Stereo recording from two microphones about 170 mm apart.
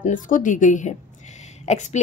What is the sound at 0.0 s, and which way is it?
A woman's voice, 50° left (ahead or behind).